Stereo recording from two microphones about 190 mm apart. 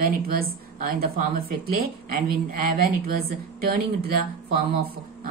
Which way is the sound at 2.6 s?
50° right (ahead or behind).